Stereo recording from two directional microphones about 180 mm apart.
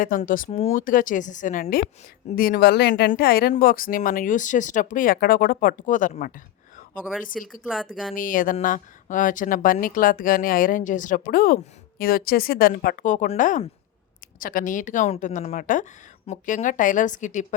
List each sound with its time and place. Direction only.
0.0 s a woman's voice: 50° left (ahead or behind)
7.3 s speech: centre (ahead or behind)
8.1 s speech: 50° left (ahead or behind)